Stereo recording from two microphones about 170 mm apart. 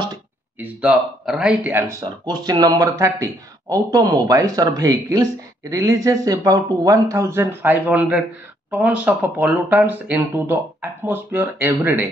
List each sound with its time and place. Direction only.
0.6 s speech: 5° right (ahead or behind)